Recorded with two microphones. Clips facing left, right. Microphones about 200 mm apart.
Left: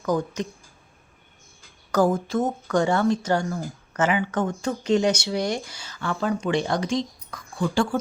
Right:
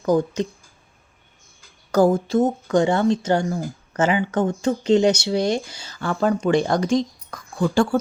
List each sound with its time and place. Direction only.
0.0 s speech: 30° right (ahead or behind)
1.9 s speech: 30° right (ahead or behind); by 7.9 s 45° right (ahead or behind)